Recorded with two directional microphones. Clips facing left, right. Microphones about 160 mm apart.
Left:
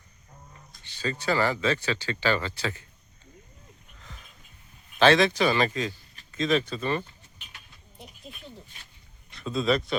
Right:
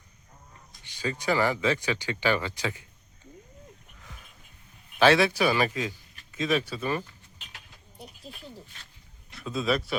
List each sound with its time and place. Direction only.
0.7 s speech: 15° right (ahead or behind)
4.9 s speech: 10° right (ahead or behind)
7.9 s a sound: centre (ahead or behind)
9.3 s speech: 5° right (ahead or behind)